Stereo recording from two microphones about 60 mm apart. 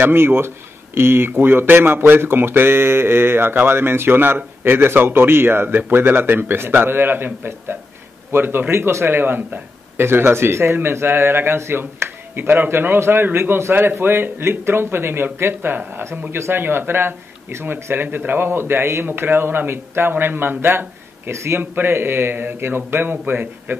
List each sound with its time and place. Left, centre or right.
0.0 s a man's voice: right
21.3 s a man's voice: right
21.5 s speech: right